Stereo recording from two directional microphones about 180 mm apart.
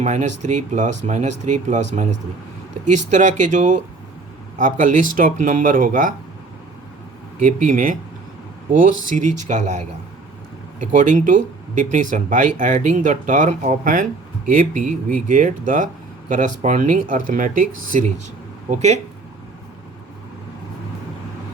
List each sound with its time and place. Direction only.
0.0 s speech: 40° right (ahead or behind)
7.4 s speech: 45° right (ahead or behind)